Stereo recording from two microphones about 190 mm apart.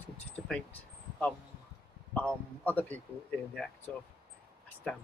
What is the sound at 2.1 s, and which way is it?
A man's voice, 10° left (ahead or behind).